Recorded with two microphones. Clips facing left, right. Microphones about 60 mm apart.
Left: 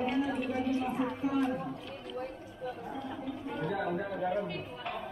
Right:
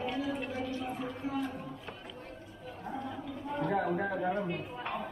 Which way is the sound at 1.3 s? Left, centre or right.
Left.